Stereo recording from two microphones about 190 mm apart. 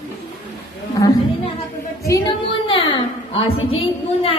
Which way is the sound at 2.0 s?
20° left (ahead or behind).